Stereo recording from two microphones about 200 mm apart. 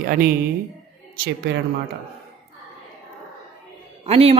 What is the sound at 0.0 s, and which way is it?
A woman's voice, 50° right (ahead or behind).